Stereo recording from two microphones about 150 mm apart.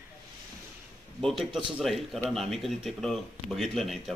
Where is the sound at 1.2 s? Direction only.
Centre (ahead or behind).